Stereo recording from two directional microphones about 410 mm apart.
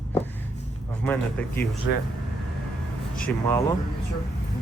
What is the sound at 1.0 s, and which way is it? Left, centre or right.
Speech, centre.